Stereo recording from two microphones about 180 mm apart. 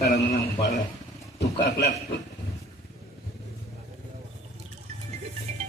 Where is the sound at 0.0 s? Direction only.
65° left (ahead or behind).